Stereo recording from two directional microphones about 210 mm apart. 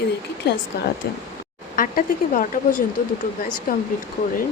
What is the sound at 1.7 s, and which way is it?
Speech, 40° left (ahead or behind).